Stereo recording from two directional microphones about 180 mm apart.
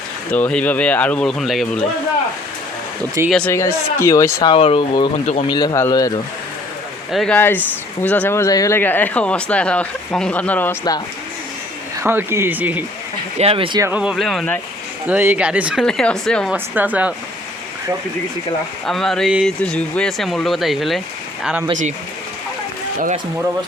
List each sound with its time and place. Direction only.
0.3 s speech: 10° left (ahead or behind)
3.2 s speech: 5° left (ahead or behind)
3.5 s speech: 15° left (ahead or behind)
4.5 s speech: 30° left (ahead or behind)
5.5 s speech: 20° left (ahead or behind)
7.1 s speech: 5° left (ahead or behind)
11.9 s speech: 15° right (ahead or behind)
13.4 s speech: 35° right (ahead or behind)
13.7 s speech: 10° right (ahead or behind); by 14.6 s 5° left (ahead or behind)
15.0 s speech: 10° right (ahead or behind)
15.8 s speech: 5° left (ahead or behind)
16.7 s speech: 10° right (ahead or behind)
18.9 s speech: centre (ahead or behind)